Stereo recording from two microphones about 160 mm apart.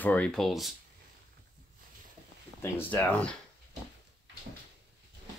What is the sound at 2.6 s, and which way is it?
Speech, 10° left (ahead or behind).